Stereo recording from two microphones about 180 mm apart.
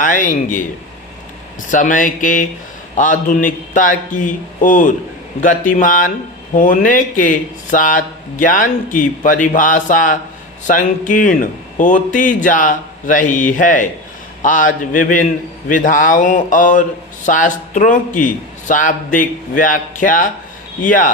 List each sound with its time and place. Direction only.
0.0 s speech: 45° left (ahead or behind)
15.7 s speech: 50° left (ahead or behind)